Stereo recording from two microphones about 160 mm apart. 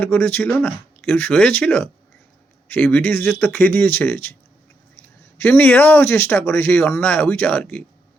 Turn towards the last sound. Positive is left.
turn(degrees=10)  # may be behind; listen again after turning